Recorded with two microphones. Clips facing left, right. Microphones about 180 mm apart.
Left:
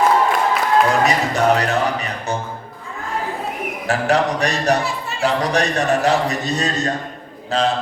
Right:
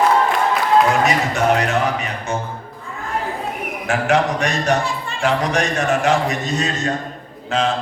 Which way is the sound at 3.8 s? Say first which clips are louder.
Even; 35° left (ahead or behind).